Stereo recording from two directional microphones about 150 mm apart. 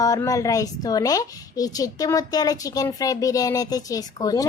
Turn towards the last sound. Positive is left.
turn(degrees=25)  # may be behind; listen again after turning